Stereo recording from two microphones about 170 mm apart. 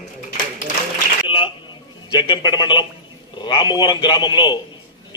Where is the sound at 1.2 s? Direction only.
30° left (ahead or behind).